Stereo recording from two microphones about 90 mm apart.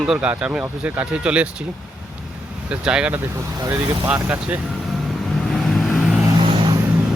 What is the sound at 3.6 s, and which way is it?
Speech, 40° right (ahead or behind).